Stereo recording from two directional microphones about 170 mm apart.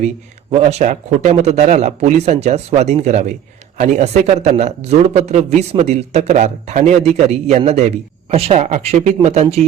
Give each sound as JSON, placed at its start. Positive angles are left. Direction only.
{"t": 0.5, "sound": "a man's voice", "side_deg": -40}